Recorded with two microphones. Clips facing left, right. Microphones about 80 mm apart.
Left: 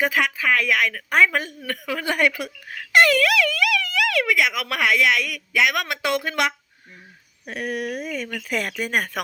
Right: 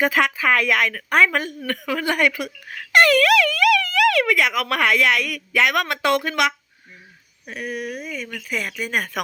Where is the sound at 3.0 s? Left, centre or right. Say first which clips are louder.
Right 3 dB; centre.